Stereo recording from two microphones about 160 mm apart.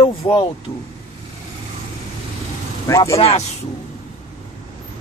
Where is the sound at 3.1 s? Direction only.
40° left (ahead or behind).